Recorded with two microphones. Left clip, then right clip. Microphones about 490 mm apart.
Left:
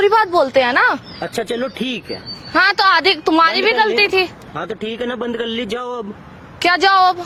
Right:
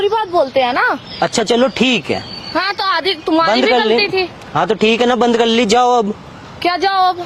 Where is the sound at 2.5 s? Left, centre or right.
Left.